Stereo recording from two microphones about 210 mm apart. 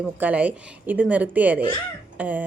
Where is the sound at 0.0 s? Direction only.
5° right (ahead or behind).